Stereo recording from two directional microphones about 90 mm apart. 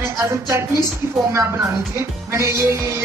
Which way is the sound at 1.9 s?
30° right (ahead or behind).